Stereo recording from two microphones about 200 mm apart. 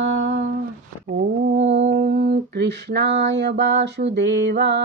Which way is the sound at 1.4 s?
65° right (ahead or behind).